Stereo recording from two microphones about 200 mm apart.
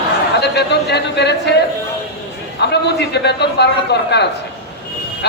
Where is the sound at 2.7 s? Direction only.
60° left (ahead or behind).